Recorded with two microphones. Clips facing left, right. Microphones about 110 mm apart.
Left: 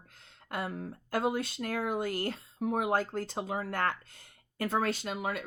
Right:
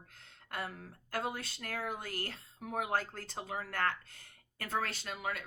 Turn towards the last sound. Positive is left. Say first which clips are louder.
# left 6 dB
turn(degrees=20)  # may be behind; listen again after turning